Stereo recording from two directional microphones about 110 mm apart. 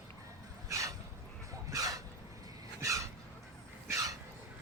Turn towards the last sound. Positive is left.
turn(degrees=-30)  # may be behind; listen again after turning